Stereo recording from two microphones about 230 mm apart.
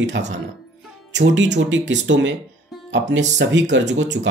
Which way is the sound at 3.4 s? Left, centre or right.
Right.